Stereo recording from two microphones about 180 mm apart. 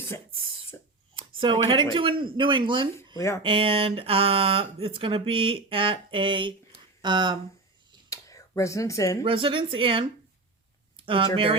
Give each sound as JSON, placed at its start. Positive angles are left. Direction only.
{"t": 1.1, "sound": "speech", "side_deg": -25}
{"t": 3.2, "sound": "speech", "side_deg": 15}
{"t": 3.4, "sound": "speech", "side_deg": -30}
{"t": 8.1, "sound": "a sound", "side_deg": 20}
{"t": 9.2, "sound": "speech", "side_deg": -30}
{"t": 10.9, "sound": "a sound", "side_deg": -30}